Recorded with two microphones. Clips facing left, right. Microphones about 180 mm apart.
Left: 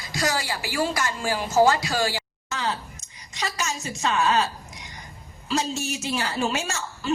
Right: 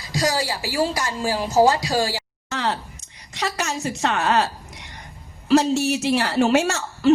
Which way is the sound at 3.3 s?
65° right (ahead or behind).